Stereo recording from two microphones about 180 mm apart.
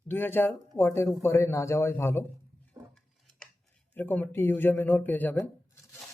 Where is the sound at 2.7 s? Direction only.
20° right (ahead or behind).